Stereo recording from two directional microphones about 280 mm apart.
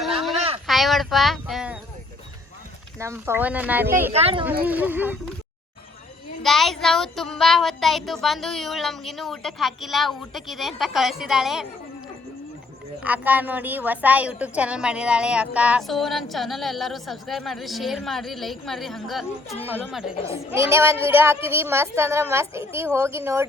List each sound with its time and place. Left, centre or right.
0.0 s a sound: centre
0.3 s a sound: right
0.7 s speech: centre
3.0 s a woman's voice: centre
4.1 s speech: right
4.6 s a woman's voice: centre
6.4 s a woman's voice: centre
13.0 s a woman's voice: centre